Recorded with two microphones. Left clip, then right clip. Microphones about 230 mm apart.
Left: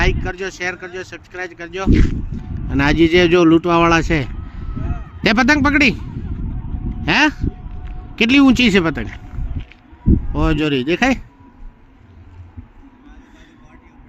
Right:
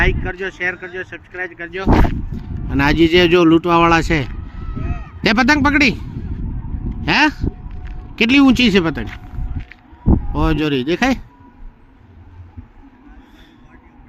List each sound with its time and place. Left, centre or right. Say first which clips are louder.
0.0 s speech: right 1 dB; centre
1.9 s speech: right 4 dB; centre
4.8 s a sound: right 1 dB; right
5.2 s speech: even; centre
6.9 s a sound: even; centre
10.3 s speech: even; centre